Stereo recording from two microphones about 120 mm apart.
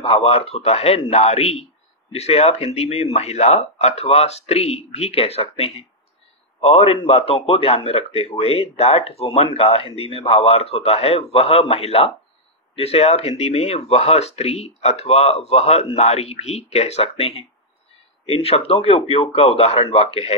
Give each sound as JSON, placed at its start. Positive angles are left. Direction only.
{"t": 0.0, "sound": "a man's voice", "side_deg": 55}